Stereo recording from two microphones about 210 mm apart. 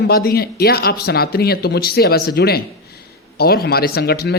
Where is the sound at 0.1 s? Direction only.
45° left (ahead or behind).